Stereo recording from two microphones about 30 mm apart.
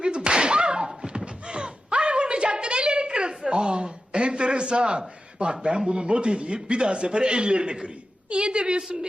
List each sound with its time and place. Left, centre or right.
0.3 s whip: right
1.1 s a sound: right
5.9 s a man's voice: right